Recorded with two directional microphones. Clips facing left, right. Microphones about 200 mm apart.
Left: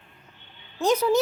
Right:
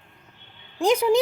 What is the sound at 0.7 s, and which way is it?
Speech, 10° right (ahead or behind).